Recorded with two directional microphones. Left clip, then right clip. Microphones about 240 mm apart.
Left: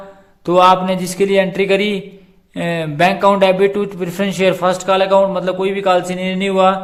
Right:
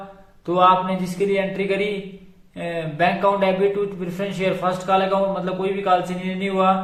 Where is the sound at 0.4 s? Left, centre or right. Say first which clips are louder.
Left 6 dB; left.